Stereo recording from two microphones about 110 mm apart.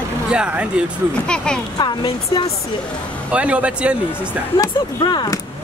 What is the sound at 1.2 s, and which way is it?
Speech, 5° left (ahead or behind).